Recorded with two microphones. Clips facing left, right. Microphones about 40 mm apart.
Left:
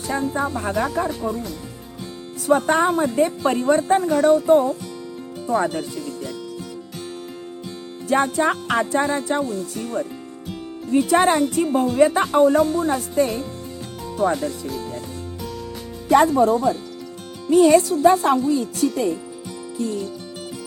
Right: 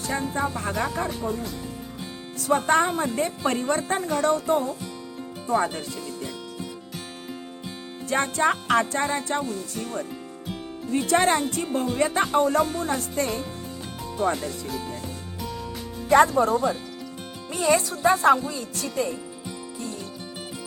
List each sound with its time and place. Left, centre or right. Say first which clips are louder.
0.1 s a woman's voice: left 4 dB; centre
8.0 s a woman's voice: left 4 dB; centre
12.5 s a woman's voice: left 5 dB; centre
16.0 s a woman's voice: left 3 dB; centre